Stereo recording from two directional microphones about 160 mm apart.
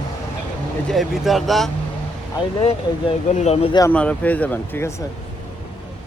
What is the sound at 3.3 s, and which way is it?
Speech, 45° left (ahead or behind).